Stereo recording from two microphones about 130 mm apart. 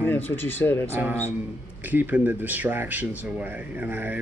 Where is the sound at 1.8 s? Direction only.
15° right (ahead or behind).